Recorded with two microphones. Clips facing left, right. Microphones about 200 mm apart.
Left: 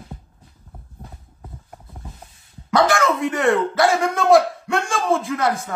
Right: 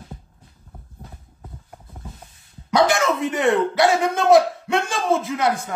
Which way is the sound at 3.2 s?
Centre (ahead or behind).